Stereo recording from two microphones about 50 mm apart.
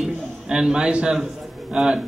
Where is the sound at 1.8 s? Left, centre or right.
Centre.